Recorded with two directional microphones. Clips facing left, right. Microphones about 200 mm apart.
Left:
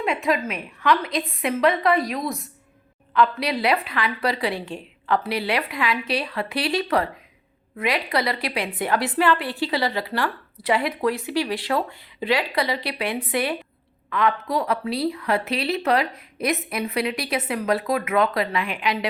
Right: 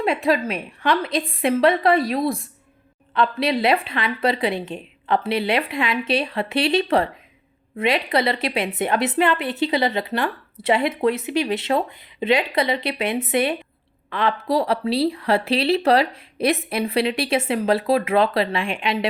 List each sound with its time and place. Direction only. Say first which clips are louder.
0.0 s a woman's voice: right 3 dB; 35° right (ahead or behind)